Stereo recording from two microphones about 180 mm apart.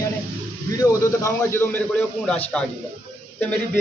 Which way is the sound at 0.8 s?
15° left (ahead or behind).